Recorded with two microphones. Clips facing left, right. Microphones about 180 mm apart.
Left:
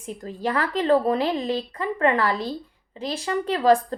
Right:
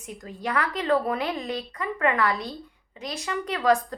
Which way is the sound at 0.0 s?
30° left (ahead or behind).